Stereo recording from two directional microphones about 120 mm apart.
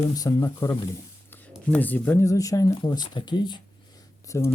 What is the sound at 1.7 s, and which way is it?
Speech, 15° left (ahead or behind).